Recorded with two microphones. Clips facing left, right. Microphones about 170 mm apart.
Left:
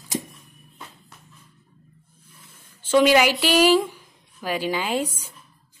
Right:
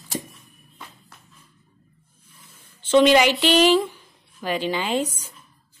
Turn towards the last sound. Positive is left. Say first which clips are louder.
# right 1 dB
turn(degrees=10)  # may be behind; listen again after turning